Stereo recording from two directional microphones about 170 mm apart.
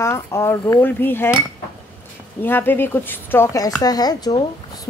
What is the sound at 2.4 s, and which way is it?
Dishes, 10° left (ahead or behind).